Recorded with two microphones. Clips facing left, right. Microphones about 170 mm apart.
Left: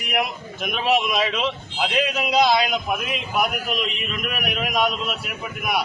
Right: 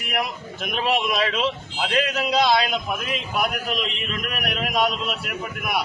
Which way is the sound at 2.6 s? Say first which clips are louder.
Left 2 dB; 10° left (ahead or behind).